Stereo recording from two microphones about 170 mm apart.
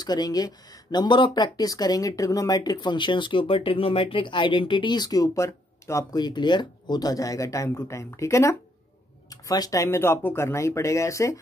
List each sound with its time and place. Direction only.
0.0 s speech: 25° left (ahead or behind)